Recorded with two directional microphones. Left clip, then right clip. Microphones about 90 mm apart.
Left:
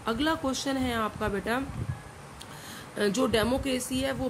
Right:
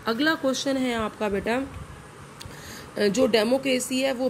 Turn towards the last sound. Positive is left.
turn(degrees=-20)  # may be behind; listen again after turning